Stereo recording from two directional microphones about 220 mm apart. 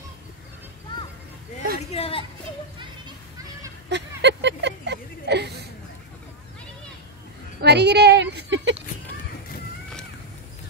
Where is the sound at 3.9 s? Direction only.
50° right (ahead or behind).